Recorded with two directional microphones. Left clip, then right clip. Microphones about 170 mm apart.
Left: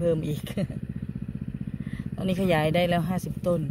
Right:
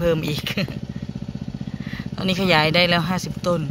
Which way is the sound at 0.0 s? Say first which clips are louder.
Right 5 dB; 10° left (ahead or behind).